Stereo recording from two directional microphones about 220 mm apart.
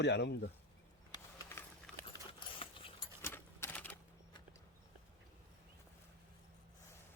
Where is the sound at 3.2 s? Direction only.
10° left (ahead or behind).